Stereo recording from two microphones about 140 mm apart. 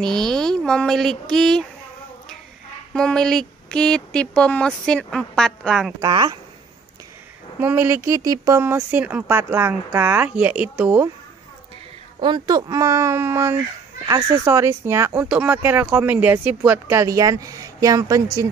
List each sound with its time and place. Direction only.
0.0 s a sound: 5° left (ahead or behind)
2.9 s speech: 5° left (ahead or behind)
6.0 s speech: 30° right (ahead or behind)
7.6 s speech: 15° right (ahead or behind)
12.2 s speech: 30° right (ahead or behind)